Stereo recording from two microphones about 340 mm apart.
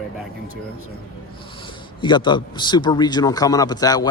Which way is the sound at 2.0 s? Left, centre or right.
Centre.